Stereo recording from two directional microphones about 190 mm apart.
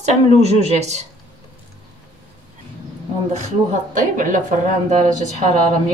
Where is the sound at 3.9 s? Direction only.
45° right (ahead or behind).